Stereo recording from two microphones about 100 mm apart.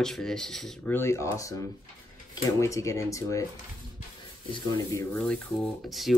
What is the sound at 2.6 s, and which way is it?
Speech, 30° left (ahead or behind).